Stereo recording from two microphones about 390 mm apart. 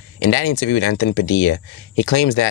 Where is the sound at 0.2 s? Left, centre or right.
Left.